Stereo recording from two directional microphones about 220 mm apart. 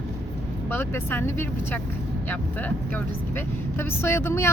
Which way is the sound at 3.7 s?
10° left (ahead or behind).